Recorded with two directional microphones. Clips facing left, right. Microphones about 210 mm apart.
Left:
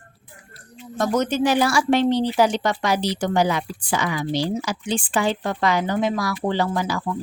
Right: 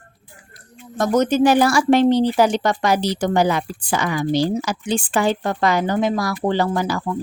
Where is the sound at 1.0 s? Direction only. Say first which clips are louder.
Right 4 dB; 40° right (ahead or behind).